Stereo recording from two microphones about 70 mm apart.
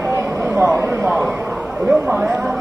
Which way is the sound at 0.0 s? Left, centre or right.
Right.